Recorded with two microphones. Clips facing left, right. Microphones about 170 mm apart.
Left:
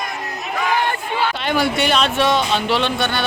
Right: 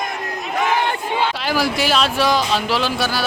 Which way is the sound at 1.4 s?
Centre (ahead or behind).